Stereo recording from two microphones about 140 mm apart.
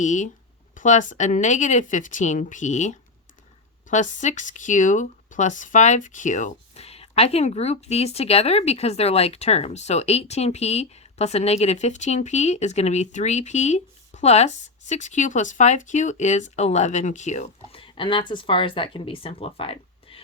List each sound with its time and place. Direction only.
0.0 s speech: 60° left (ahead or behind)
17.7 s speech: 35° left (ahead or behind)